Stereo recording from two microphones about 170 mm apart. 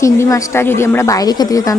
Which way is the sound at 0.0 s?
20° left (ahead or behind).